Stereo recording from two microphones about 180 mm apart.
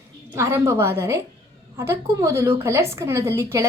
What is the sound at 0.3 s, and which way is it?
A woman's voice, 15° right (ahead or behind).